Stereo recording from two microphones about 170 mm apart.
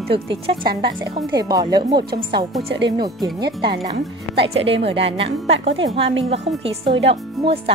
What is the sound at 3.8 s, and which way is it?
Speech, 35° right (ahead or behind).